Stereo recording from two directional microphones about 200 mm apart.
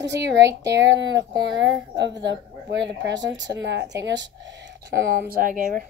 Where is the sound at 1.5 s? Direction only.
65° right (ahead or behind); by 5.8 s 40° right (ahead or behind).